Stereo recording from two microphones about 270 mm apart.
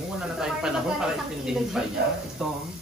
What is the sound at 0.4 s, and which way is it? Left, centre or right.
Speech, centre.